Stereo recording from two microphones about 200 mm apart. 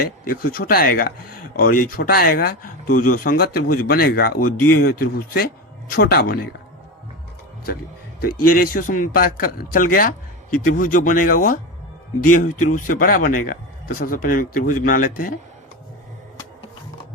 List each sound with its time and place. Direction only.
0.0 s speech: 45° left (ahead or behind)
8.2 s speech: 45° left (ahead or behind)